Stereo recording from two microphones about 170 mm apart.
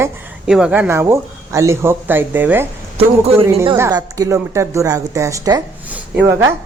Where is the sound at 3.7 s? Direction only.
15° right (ahead or behind).